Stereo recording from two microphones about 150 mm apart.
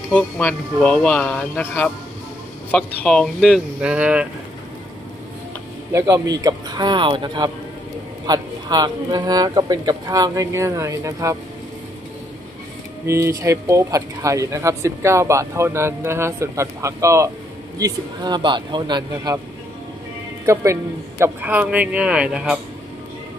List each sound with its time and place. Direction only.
0.1 s speech: 10° left (ahead or behind); by 4.3 s 10° right (ahead or behind)
5.9 s speech: 25° right (ahead or behind)
13.0 s speech: 20° right (ahead or behind)
20.4 s a man's voice: 20° right (ahead or behind)